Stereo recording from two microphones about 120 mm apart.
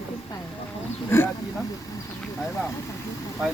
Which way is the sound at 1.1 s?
20° left (ahead or behind).